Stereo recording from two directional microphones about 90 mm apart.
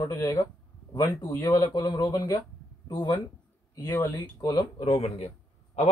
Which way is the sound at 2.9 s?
50° left (ahead or behind).